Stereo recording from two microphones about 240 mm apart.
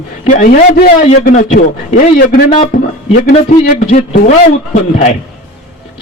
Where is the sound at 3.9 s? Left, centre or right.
Left.